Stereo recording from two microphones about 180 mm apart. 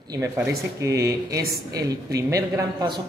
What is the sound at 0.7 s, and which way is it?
Speech, 15° right (ahead or behind).